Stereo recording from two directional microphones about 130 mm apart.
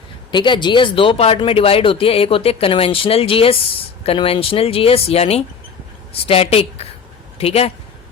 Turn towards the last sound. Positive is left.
turn(degrees=50)  # may be behind; listen again after turning